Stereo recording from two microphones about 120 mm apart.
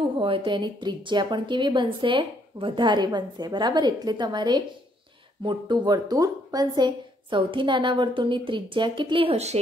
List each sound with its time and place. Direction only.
0.2 s a woman's voice: 45° right (ahead or behind)
9.3 s speech: 65° right (ahead or behind)